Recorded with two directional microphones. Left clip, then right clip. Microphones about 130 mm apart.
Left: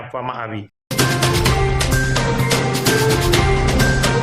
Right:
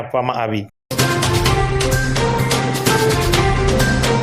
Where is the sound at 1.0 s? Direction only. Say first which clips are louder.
Even; centre (ahead or behind).